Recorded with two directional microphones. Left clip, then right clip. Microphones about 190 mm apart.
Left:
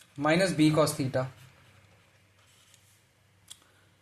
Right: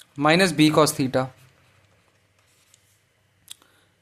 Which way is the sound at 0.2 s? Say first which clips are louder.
Right 7 dB; 45° right (ahead or behind).